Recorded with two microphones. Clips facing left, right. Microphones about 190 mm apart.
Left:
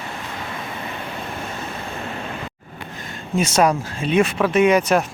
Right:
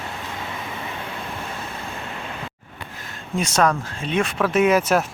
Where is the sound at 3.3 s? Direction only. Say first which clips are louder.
Left 3 dB; 5° left (ahead or behind).